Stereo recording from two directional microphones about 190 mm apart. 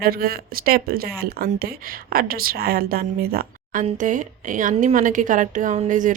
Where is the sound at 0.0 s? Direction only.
50° right (ahead or behind).